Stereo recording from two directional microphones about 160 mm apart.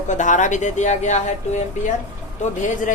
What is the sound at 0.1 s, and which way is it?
Speech, 50° left (ahead or behind).